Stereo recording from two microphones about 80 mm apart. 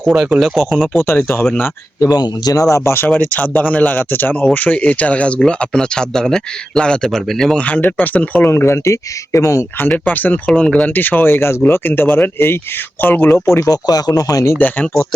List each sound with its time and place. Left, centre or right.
0.0 s speech: centre
1.0 s speech: left
2.0 s speech: left
3.2 s speech: left; by 7.6 s centre
7.6 s speech: left
10.0 s speech: left
13.7 s speech: left